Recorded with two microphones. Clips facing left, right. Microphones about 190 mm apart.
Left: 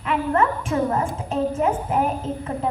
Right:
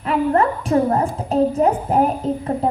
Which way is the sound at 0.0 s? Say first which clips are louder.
Right 4 dB; 35° right (ahead or behind).